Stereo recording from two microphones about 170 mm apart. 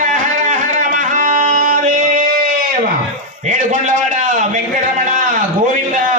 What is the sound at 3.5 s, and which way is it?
Speech, 45° right (ahead or behind).